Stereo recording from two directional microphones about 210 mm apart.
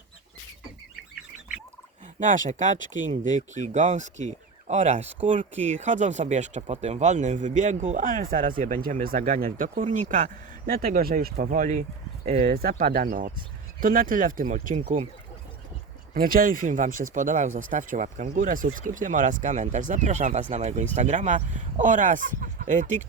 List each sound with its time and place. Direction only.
2.1 s speech: 40° right (ahead or behind)
16.1 s speech: 40° right (ahead or behind)